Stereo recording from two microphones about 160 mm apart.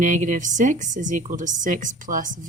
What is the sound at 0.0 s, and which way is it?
A woman's voice, 50° right (ahead or behind).